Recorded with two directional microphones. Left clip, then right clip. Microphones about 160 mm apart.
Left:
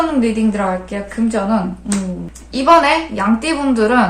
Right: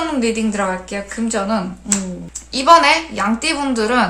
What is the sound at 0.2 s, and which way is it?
A woman's voice, 25° right (ahead or behind).